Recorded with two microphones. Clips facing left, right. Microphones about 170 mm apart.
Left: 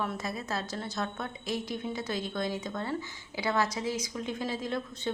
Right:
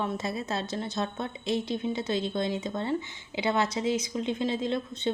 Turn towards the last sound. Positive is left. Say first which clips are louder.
# right 4 dB
turn(degrees=-25)  # may be behind; listen again after turning